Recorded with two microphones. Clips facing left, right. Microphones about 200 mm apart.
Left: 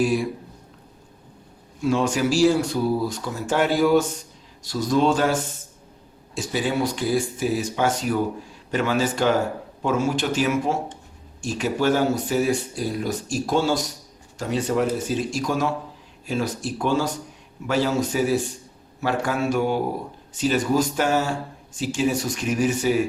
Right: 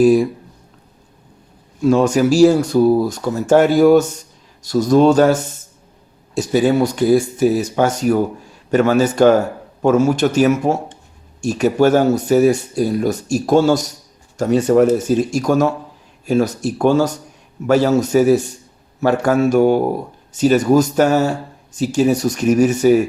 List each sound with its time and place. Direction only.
0.0 s speech: 40° right (ahead or behind)
1.8 s speech: 40° right (ahead or behind)